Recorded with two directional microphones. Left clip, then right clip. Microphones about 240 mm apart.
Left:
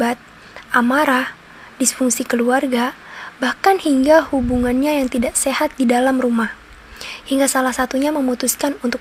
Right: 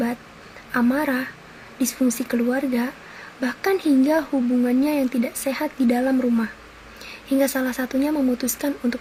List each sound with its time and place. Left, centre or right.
0.7 s a woman's voice: left